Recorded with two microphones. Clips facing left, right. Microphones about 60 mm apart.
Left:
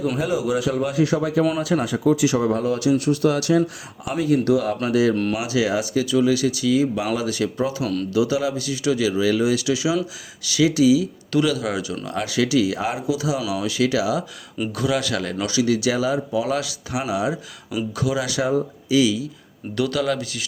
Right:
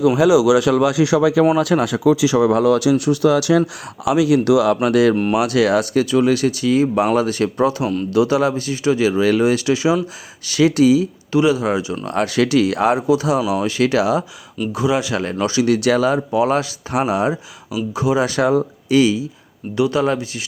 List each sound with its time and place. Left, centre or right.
0.2 s speech: right
1.5 s speech: right
2.4 s speech: right
4.0 s speech: right
11.3 s speech: right
12.0 s speech: right
14.8 s speech: right
15.6 s speech: right
17.9 s speech: right
19.7 s speech: right